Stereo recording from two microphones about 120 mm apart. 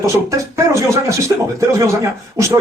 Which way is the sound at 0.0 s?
25° right (ahead or behind).